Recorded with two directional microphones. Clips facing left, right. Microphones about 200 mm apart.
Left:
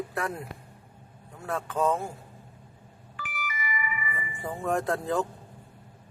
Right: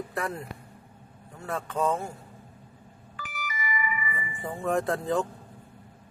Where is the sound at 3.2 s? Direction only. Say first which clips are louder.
Even; 40° right (ahead or behind).